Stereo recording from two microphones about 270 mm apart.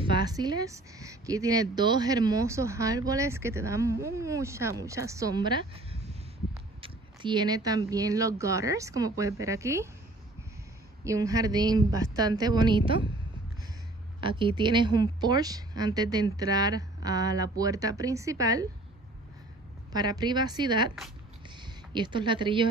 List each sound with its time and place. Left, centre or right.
0.0 s a woman's voice: centre
11.1 s a woman's voice: centre
14.2 s a woman's voice: centre
19.9 s a woman's voice: centre
21.9 s a woman's voice: centre